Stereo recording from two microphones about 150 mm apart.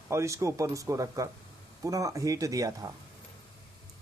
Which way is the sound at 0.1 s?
20° right (ahead or behind).